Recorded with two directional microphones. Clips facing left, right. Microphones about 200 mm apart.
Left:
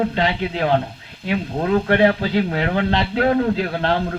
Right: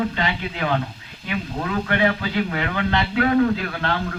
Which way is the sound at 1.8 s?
50° left (ahead or behind).